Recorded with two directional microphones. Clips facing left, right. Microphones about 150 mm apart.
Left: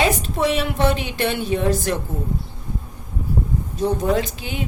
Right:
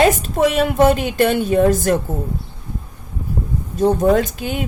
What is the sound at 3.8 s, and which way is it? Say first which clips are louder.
Speech: right 6 dB; 45° right (ahead or behind).